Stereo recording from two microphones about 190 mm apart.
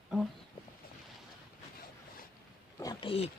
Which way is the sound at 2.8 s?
20° left (ahead or behind).